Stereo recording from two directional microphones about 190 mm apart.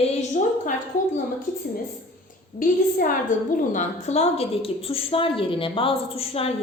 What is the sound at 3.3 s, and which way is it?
A woman's voice, 40° left (ahead or behind).